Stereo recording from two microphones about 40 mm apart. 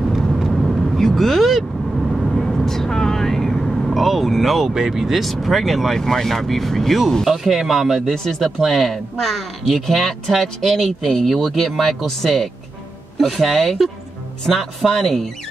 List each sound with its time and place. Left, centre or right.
0.3 s vehicle: centre
4.7 s speech: centre
7.2 s speech: centre
8.1 s speech: centre
11.5 s speech: centre